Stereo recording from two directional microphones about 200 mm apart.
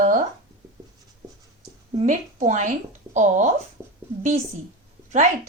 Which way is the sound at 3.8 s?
15° right (ahead or behind).